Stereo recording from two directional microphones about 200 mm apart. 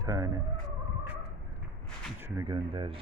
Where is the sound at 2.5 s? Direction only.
25° right (ahead or behind).